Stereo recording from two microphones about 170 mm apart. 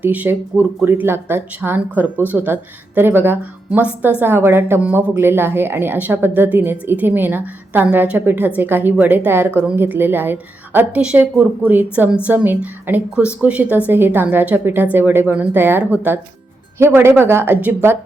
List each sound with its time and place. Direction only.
0.0 s a woman's voice: 10° right (ahead or behind)